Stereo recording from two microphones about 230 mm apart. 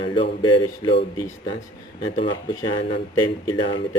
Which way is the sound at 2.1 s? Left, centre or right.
Left.